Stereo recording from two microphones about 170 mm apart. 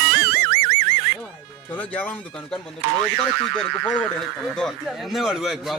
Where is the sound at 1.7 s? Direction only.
10° left (ahead or behind).